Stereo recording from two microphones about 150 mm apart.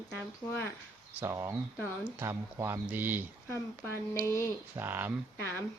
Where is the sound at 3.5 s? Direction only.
15° left (ahead or behind).